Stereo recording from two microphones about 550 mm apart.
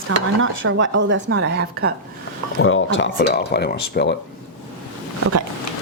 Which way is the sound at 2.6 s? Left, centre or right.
Left.